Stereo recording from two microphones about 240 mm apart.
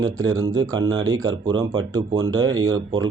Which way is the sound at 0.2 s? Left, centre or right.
Centre.